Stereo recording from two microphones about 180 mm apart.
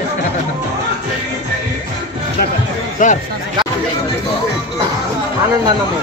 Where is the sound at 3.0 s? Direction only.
45° left (ahead or behind).